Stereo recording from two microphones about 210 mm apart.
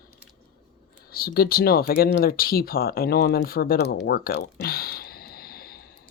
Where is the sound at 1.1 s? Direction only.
45° left (ahead or behind).